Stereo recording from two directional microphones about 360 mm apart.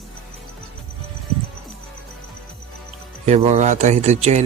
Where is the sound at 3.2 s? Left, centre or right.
Centre.